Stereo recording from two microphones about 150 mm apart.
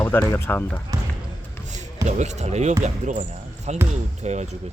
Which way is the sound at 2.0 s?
50° right (ahead or behind).